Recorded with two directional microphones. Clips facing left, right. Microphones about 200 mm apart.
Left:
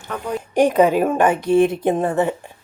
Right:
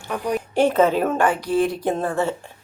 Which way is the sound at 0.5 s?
15° left (ahead or behind).